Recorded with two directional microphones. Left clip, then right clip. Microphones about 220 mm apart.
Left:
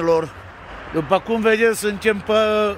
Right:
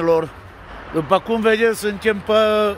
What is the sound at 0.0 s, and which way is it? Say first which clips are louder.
A man's voice: right 1 dB; 5° right (ahead or behind).